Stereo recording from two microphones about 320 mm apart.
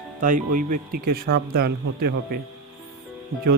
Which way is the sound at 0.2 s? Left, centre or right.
Right.